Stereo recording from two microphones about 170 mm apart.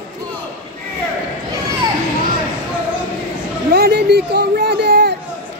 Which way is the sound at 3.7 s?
75° right (ahead or behind).